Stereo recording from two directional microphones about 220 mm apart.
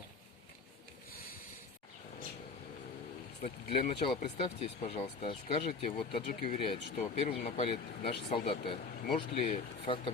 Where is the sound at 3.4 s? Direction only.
25° left (ahead or behind).